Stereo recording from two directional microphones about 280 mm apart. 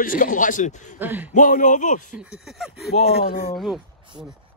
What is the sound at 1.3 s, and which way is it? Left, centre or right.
Speech, left.